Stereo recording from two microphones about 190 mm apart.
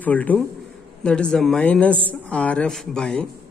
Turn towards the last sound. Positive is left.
turn(degrees=5)  # may be behind; listen again after turning